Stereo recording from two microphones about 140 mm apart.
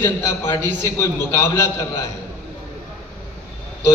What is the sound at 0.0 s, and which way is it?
A man's voice, 15° left (ahead or behind).